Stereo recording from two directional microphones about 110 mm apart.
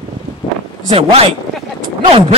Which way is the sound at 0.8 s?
65° right (ahead or behind).